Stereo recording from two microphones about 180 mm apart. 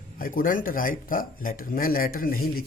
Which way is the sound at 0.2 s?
50° left (ahead or behind).